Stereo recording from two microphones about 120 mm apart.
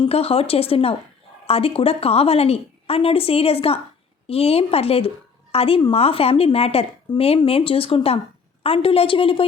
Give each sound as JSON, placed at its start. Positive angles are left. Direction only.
{"t": 0.0, "sound": "a woman's voice", "side_deg": 55}
{"t": 7.1, "sound": "speech", "side_deg": 40}
{"t": 7.4, "sound": "speech", "side_deg": 50}